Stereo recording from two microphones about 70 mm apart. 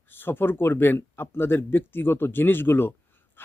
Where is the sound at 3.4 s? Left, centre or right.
Left.